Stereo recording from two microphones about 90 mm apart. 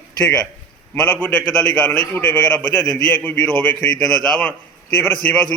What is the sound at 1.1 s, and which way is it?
A man's voice, 20° left (ahead or behind).